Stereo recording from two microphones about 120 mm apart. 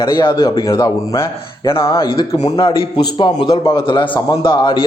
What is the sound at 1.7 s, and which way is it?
Speech, 25° left (ahead or behind).